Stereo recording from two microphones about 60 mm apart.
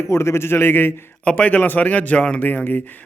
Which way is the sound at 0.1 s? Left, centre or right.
Left.